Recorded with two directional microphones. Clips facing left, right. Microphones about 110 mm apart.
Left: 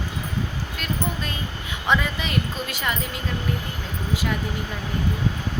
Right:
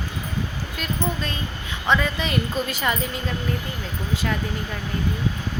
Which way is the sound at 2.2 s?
Centre (ahead or behind).